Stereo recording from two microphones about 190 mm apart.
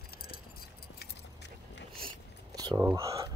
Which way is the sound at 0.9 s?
65° left (ahead or behind).